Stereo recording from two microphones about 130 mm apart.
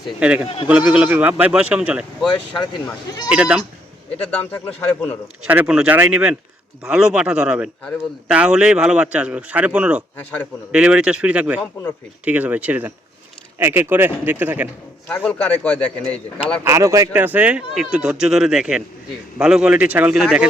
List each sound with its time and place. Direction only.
0.2 s speech: 10° right (ahead or behind)
0.4 s speech: 45° left (ahead or behind)
0.7 s speech: 10° right (ahead or behind)
2.2 s speech: 35° left (ahead or behind)
3.2 s speech: 10° right (ahead or behind)
4.5 s speech: 15° left (ahead or behind)
5.5 s a man's voice: 10° right (ahead or behind)
15.3 s speech: 10° left (ahead or behind)
16.6 s speech: 25° right (ahead or behind)
17.2 s speech: 10° right (ahead or behind)